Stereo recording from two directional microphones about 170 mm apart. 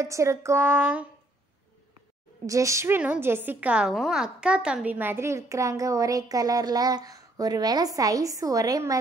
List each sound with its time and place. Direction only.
0.0 s speech: 15° right (ahead or behind)
2.4 s a woman's voice: 20° right (ahead or behind)